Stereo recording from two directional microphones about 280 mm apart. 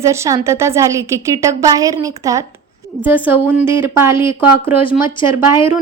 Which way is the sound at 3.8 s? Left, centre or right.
Centre.